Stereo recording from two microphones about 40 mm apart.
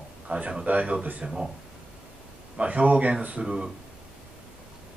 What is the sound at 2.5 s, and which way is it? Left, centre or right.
Speech, right.